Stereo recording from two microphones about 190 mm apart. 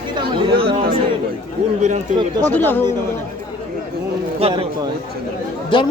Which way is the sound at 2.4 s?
10° left (ahead or behind).